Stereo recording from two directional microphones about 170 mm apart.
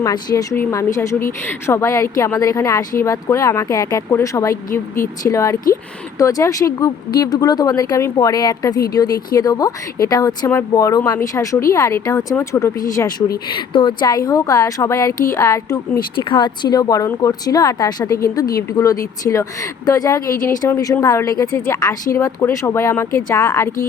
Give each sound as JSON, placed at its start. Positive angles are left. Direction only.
{"t": 0.0, "sound": "speech", "side_deg": 20}
{"t": 13.5, "sound": "speech", "side_deg": 30}